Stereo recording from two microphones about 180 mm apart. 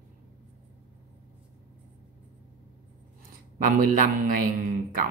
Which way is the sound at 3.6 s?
50° right (ahead or behind).